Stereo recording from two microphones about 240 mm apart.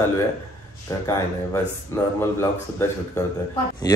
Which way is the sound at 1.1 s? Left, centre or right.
Centre.